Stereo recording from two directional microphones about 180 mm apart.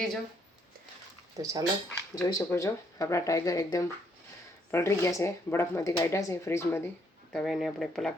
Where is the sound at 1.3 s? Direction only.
20° right (ahead or behind).